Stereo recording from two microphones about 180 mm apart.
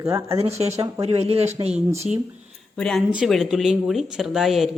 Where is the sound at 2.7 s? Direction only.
5° left (ahead or behind).